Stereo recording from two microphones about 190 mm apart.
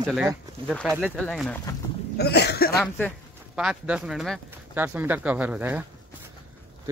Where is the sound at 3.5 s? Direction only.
5° right (ahead or behind).